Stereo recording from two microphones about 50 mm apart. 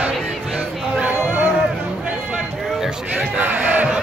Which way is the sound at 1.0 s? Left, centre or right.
Right.